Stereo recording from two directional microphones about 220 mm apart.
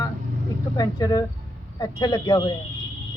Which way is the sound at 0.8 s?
15° left (ahead or behind).